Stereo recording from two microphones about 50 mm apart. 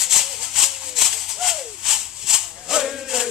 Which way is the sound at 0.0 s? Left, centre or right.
Centre.